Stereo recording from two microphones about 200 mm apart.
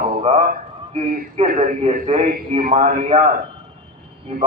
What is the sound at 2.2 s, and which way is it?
A man's voice, 45° right (ahead or behind).